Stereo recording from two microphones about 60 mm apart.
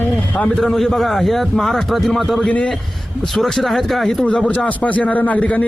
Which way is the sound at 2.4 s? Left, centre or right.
Centre.